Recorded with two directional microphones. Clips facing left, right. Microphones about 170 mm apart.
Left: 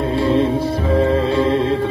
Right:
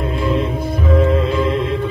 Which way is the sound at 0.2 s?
30° left (ahead or behind).